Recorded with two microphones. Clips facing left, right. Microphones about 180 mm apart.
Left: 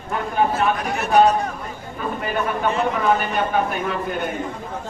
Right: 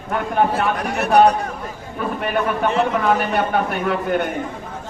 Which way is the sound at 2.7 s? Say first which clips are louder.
Right 1 dB; 70° right (ahead or behind).